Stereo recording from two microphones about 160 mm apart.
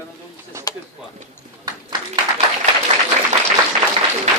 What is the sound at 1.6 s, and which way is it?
Clapping, 25° right (ahead or behind).